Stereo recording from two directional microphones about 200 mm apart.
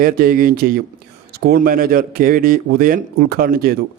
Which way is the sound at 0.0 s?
45° right (ahead or behind).